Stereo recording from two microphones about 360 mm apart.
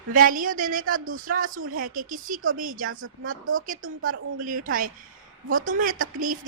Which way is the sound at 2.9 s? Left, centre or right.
Right.